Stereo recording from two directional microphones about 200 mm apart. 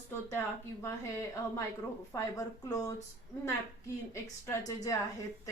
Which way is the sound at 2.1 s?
15° left (ahead or behind).